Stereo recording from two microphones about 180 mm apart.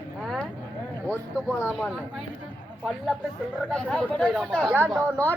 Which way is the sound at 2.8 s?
Centre (ahead or behind).